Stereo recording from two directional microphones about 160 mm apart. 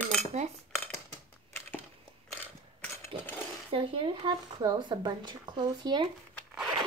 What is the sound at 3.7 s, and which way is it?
Speech, 35° right (ahead or behind).